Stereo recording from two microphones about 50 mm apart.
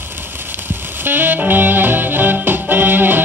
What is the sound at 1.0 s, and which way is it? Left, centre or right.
Music, right.